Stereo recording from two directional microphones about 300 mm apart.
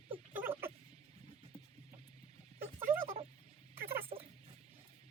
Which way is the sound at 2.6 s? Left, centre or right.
Centre.